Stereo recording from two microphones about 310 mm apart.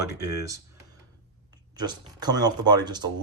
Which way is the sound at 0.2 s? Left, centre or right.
Centre.